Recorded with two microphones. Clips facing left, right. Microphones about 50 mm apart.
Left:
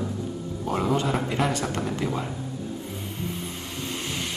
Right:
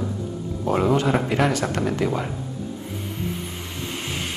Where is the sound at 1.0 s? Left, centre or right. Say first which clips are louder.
Right 4 dB; centre.